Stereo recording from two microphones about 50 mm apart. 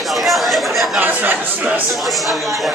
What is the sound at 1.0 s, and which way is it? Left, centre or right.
Speech, right.